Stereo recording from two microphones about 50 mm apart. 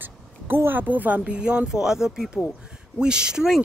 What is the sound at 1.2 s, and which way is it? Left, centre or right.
Speech, centre.